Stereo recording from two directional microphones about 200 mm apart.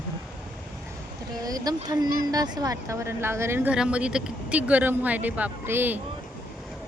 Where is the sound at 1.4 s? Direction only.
20° right (ahead or behind).